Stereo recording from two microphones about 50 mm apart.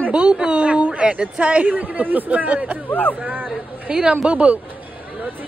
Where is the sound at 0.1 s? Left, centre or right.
Centre.